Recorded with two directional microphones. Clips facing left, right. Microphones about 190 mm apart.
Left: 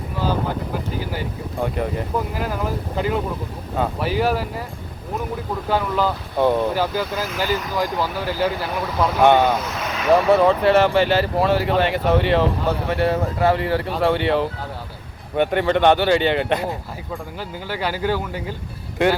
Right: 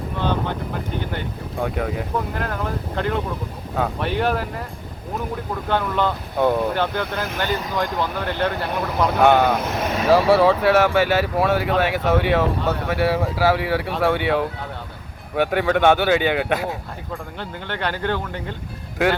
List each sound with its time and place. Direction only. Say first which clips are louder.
0.2 s speech: left 1 dB; 5° left (ahead or behind)
5.6 s speech: left 1 dB; 5° left (ahead or behind)
9.6 s speech: right 3 dB; 55° right (ahead or behind)
10.1 s speech: even; 5° right (ahead or behind)